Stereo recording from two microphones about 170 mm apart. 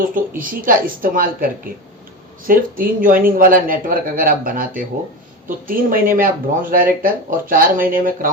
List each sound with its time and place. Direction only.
0.1 s speech: 55° right (ahead or behind)